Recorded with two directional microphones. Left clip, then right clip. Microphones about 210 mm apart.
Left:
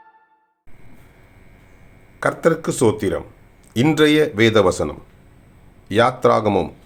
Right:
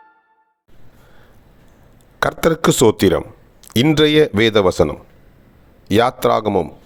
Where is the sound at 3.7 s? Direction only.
40° right (ahead or behind).